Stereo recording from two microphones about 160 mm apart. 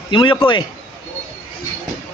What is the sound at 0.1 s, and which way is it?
Speech, 30° left (ahead or behind).